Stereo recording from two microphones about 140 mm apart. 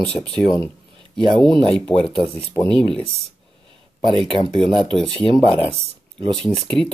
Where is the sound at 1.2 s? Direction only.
35° right (ahead or behind).